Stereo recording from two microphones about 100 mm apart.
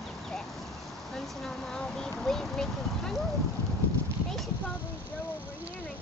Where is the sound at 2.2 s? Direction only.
5° left (ahead or behind).